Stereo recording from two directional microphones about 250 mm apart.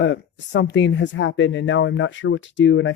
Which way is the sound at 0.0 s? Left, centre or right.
Left.